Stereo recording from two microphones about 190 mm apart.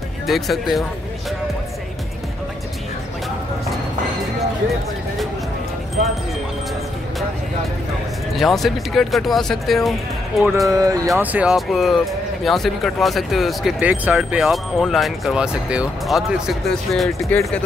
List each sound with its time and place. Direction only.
0.3 s speech: centre (ahead or behind)
8.4 s speech: centre (ahead or behind)
10.7 s speech: 15° right (ahead or behind)
11.1 s speech: 5° right (ahead or behind)